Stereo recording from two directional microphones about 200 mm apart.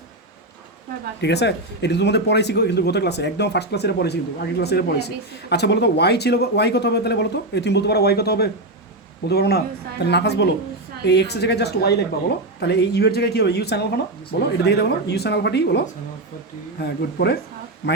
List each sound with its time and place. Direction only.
1.2 s a man's voice: 60° left (ahead or behind)
16.8 s a man's voice: 55° left (ahead or behind)